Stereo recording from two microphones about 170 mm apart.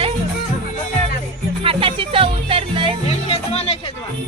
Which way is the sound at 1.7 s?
30° right (ahead or behind).